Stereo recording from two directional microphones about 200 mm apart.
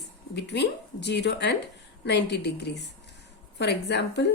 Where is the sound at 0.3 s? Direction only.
60° left (ahead or behind).